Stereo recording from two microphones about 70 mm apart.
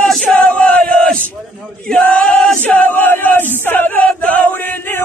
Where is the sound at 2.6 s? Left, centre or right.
Left.